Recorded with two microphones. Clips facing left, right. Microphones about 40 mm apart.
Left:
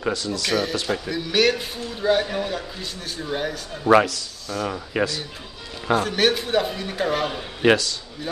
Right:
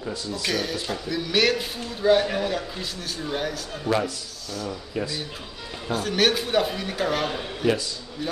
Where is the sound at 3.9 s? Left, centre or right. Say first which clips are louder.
Left 9 dB; left.